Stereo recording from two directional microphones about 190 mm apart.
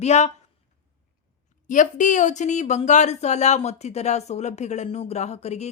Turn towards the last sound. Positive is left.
turn(degrees=35)  # may be behind; listen again after turning